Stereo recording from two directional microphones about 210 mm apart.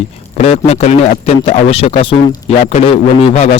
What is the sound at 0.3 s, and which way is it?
Speech, 30° left (ahead or behind).